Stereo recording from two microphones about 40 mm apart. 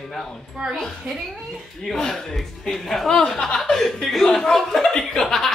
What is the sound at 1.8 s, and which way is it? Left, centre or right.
A woman's voice, centre.